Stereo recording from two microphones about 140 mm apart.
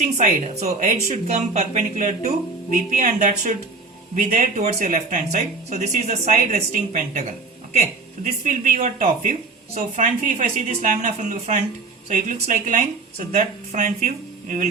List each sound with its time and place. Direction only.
0.0 s speech: 60° right (ahead or behind)